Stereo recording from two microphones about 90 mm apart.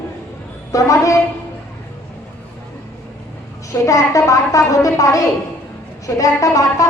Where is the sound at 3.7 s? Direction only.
35° left (ahead or behind).